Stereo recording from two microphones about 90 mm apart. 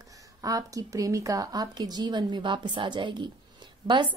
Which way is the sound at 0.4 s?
40° right (ahead or behind).